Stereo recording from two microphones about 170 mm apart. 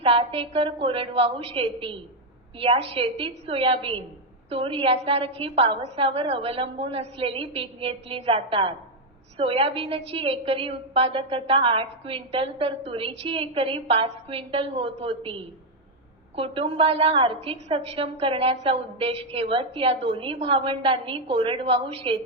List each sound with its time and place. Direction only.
0.0 s a woman's voice: 30° right (ahead or behind)